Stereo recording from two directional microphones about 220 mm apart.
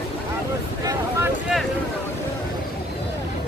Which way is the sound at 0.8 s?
10° right (ahead or behind).